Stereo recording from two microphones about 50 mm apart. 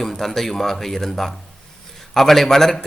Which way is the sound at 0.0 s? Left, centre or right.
Centre.